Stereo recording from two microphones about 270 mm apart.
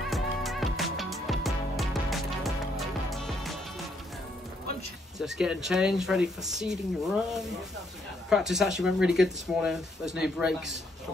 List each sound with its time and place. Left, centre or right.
0.1 s music: centre
5.2 s speech: centre